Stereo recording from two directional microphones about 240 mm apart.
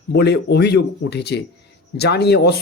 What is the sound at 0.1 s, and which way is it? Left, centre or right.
Speech, left.